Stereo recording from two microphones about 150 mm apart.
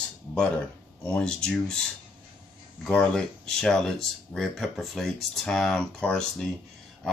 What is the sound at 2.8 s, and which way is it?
Speech, 5° left (ahead or behind).